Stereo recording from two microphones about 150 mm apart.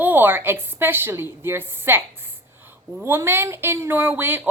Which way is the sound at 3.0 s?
15° right (ahead or behind).